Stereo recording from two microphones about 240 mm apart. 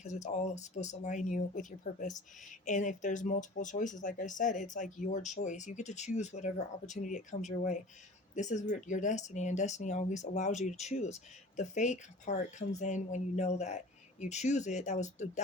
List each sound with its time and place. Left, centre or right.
0.0 s speech: left